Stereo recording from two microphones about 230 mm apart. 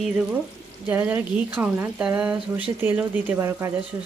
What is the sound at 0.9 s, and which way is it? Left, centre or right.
Speech, centre.